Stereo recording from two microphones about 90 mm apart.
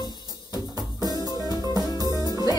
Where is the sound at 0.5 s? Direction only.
45° right (ahead or behind).